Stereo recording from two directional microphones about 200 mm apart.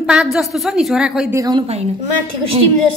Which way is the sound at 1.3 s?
20° right (ahead or behind).